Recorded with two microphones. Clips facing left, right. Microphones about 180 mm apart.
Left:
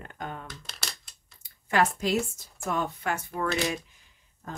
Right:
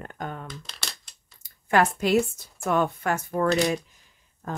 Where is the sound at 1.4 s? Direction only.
55° right (ahead or behind).